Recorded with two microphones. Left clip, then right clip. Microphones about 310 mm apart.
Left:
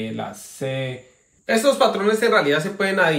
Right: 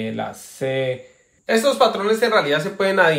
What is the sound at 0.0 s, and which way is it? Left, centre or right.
Speech, right.